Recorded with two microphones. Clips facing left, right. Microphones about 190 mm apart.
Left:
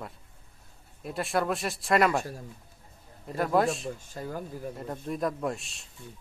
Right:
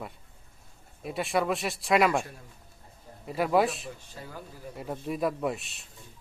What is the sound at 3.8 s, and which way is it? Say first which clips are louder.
Speech: left 6 dB; 45° left (ahead or behind).